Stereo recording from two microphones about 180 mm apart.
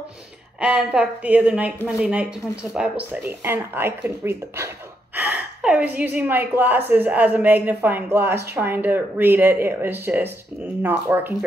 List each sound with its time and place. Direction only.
0.6 s speech: 5° right (ahead or behind)